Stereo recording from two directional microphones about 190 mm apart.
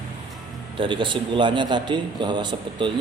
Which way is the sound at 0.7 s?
25° right (ahead or behind).